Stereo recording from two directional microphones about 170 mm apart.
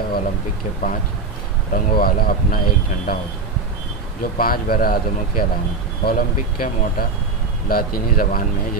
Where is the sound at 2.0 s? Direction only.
60° left (ahead or behind).